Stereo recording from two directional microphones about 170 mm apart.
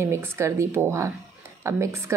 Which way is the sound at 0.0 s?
15° right (ahead or behind).